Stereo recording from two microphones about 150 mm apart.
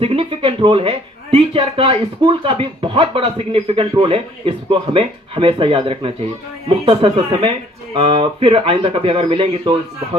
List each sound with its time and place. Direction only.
0.0 s speech: 40° right (ahead or behind)